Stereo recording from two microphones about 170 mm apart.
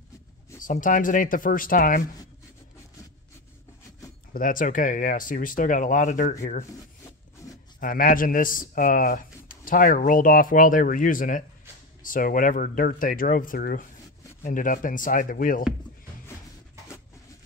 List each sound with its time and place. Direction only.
0.6 s speech: 50° left (ahead or behind)
4.3 s speech: 55° left (ahead or behind)
7.4 s livestock: 20° left (ahead or behind)
7.8 s speech: 55° left (ahead or behind)